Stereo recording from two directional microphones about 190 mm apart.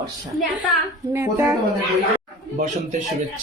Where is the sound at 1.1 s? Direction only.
10° right (ahead or behind).